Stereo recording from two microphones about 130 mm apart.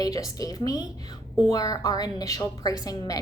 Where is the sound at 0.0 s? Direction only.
30° left (ahead or behind).